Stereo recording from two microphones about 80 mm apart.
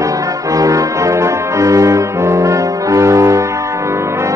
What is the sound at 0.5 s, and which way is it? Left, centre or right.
Music, right.